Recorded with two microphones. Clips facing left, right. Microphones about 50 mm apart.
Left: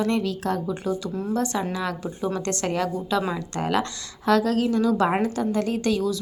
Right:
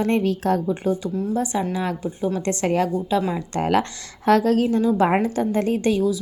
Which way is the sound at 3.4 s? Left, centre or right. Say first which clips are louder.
Right 4 dB; right.